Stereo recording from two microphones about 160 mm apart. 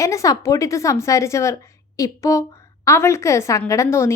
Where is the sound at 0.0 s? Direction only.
20° left (ahead or behind).